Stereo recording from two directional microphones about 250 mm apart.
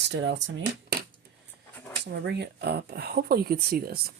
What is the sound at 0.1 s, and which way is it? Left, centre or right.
Speech, right.